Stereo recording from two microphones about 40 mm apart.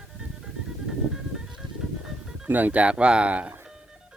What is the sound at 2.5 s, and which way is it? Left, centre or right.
Speech, right.